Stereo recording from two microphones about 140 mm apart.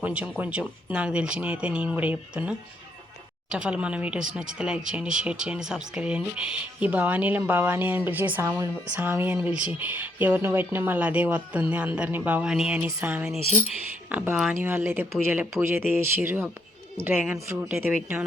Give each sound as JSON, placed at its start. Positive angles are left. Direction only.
{"t": 0.0, "sound": "speech", "side_deg": -10}